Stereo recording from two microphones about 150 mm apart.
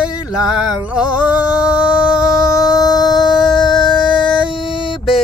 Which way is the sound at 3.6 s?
30° left (ahead or behind).